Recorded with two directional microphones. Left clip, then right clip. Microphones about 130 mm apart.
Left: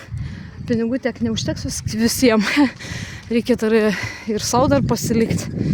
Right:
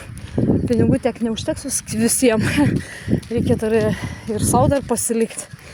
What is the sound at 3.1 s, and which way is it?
Speech, 50° left (ahead or behind).